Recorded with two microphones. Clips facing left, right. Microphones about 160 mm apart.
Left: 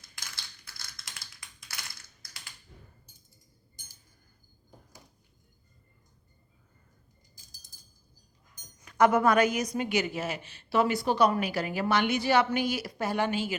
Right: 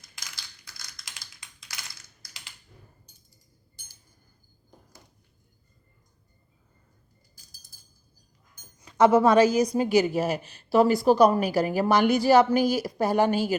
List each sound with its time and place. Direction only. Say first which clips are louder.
0.2 s typing: even; 15° right (ahead or behind)
8.8 s a woman's voice: right 4 dB; 25° right (ahead or behind); by 13.6 s 40° right (ahead or behind)